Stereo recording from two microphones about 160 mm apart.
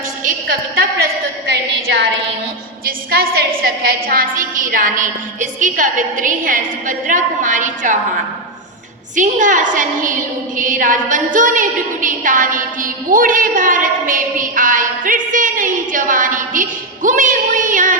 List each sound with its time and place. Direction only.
0.8 s a woman's voice: 80° right
2.8 s a woman's voice: 70° right (ahead or behind); by 7.9 s 50° right (ahead or behind)
9.1 s a woman's voice: 50° right (ahead or behind)